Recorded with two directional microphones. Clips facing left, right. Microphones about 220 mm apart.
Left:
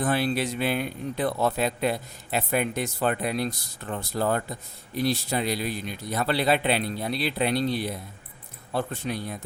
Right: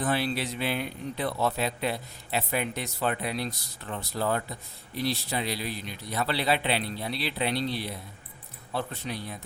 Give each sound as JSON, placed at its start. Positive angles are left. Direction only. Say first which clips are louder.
{"t": 0.0, "sound": "a man's voice", "louder": "left 3 dB", "side_deg": 50}